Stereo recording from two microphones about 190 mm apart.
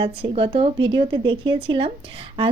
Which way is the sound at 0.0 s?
25° right (ahead or behind).